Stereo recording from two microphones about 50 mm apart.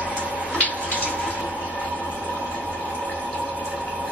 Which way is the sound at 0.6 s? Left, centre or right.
Left.